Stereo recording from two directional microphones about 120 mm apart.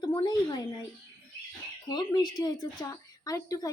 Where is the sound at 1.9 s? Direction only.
35° left (ahead or behind).